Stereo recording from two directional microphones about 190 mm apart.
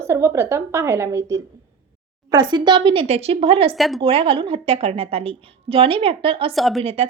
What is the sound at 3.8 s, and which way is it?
Speech, centre (ahead or behind).